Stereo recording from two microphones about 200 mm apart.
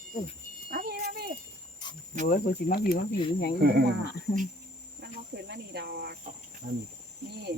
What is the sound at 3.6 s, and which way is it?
Speech, 55° right (ahead or behind).